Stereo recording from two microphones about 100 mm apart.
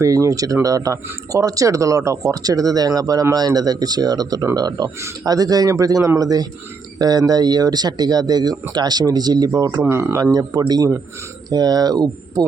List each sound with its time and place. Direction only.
0.0 s speech: 35° right (ahead or behind)
9.8 s speech: 25° right (ahead or behind)
10.7 s speech: 40° right (ahead or behind)